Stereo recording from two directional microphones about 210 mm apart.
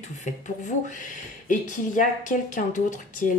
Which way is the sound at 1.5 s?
40° left (ahead or behind).